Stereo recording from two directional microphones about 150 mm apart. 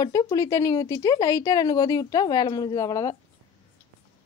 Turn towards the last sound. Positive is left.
turn(degrees=20)  # may be behind; listen again after turning